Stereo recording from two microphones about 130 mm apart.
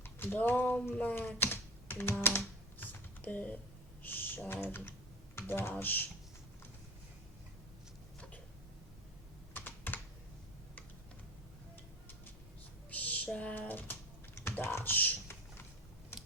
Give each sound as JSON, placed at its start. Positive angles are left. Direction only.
{"t": 0.0, "sound": "speech", "side_deg": 15}
{"t": 2.8, "sound": "typing", "side_deg": 15}
{"t": 5.4, "sound": "speech", "side_deg": 20}
{"t": 9.5, "sound": "computer keyboard", "side_deg": 15}
{"t": 12.9, "sound": "speech", "side_deg": 10}
{"t": 14.4, "sound": "typing", "side_deg": 15}